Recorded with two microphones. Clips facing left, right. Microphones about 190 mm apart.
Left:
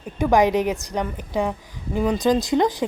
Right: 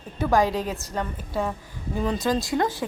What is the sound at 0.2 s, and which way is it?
A woman's voice, 15° left (ahead or behind).